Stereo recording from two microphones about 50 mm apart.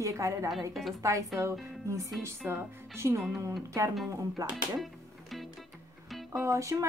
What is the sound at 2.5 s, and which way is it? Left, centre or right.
Speech, right.